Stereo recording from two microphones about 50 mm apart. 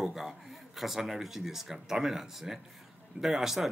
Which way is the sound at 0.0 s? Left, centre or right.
Centre.